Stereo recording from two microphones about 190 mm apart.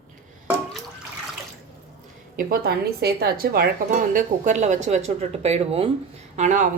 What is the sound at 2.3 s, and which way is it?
A woman's voice, 50° right (ahead or behind).